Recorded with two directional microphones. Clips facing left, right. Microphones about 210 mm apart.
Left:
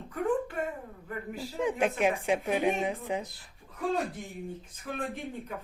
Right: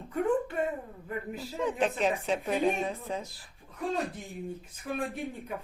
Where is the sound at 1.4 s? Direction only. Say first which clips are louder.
Left 1 dB; 15° left (ahead or behind).